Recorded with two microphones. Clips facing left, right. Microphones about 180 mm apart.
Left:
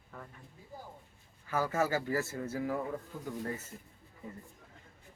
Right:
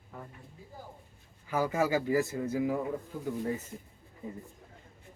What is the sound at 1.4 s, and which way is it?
Speech, 15° right (ahead or behind).